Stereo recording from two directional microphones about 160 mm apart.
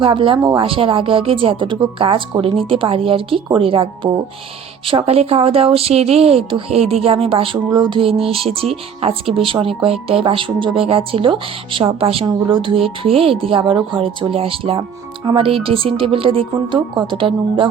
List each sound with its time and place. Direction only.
0.0 s speech: 35° right (ahead or behind)